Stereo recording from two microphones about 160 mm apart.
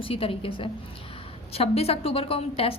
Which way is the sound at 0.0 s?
35° left (ahead or behind).